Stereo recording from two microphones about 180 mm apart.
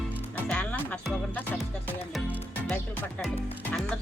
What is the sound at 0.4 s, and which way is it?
Music, 5° left (ahead or behind).